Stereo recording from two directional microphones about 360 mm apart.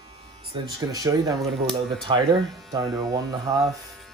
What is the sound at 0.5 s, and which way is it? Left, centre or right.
Speech, centre.